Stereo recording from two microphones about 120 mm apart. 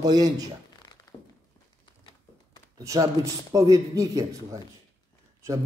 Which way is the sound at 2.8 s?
25° right (ahead or behind).